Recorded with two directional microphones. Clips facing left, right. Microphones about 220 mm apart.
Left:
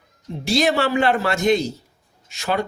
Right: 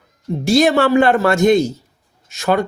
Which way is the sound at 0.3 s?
50° right (ahead or behind).